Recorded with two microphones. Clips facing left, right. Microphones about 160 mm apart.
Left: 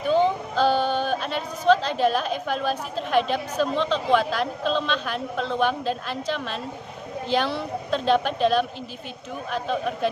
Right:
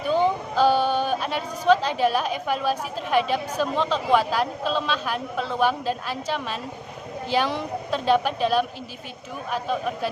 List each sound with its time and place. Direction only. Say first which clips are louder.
0.1 s speech: left 1 dB; 10° right (ahead or behind)